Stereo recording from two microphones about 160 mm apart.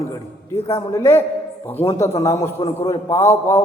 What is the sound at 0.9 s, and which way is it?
A man's voice, 15° left (ahead or behind).